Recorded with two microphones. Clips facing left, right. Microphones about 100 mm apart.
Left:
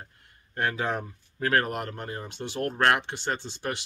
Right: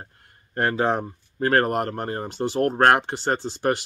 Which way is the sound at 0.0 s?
40° right (ahead or behind).